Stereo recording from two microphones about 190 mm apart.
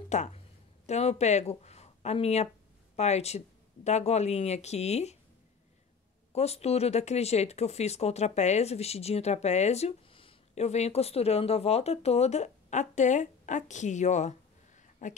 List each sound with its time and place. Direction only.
0.1 s a woman's voice: 35° left (ahead or behind)
6.3 s speech: 35° left (ahead or behind)